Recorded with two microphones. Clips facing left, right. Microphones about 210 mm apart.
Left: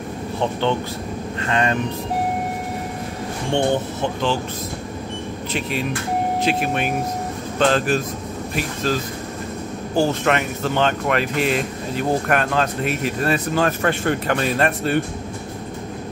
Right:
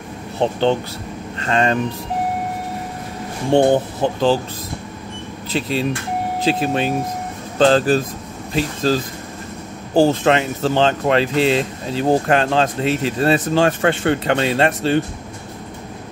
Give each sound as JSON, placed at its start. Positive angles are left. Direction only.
{"t": 0.4, "sound": "speech", "side_deg": -35}
{"t": 3.5, "sound": "speech", "side_deg": -35}
{"t": 5.5, "sound": "speech", "side_deg": -30}